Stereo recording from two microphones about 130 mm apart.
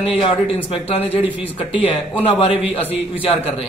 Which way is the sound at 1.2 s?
15° right (ahead or behind).